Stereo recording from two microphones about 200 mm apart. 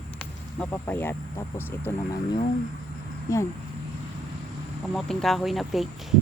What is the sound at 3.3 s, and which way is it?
Speech, 15° left (ahead or behind).